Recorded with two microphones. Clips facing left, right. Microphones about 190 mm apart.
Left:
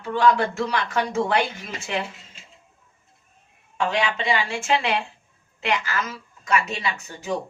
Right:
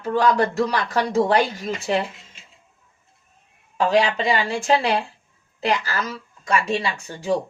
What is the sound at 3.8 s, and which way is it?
A woman's voice, 35° right (ahead or behind).